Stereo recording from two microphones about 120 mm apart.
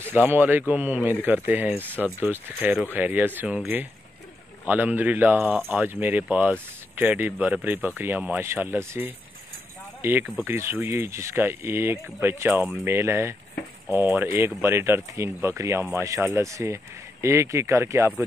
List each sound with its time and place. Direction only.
0.0 s speech: 15° right (ahead or behind)